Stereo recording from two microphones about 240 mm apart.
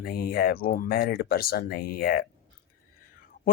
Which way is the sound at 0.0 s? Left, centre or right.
Left.